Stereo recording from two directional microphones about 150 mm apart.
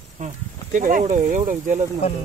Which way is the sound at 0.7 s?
65° right (ahead or behind).